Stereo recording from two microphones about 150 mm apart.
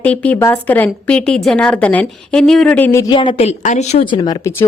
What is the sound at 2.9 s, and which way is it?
Speech, 25° left (ahead or behind).